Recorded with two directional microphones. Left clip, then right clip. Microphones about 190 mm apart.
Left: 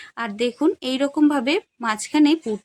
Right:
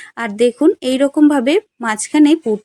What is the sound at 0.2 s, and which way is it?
Speech, 15° right (ahead or behind).